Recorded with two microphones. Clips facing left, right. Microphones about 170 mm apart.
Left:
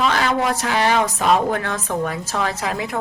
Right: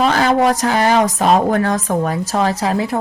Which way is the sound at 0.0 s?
40° right (ahead or behind).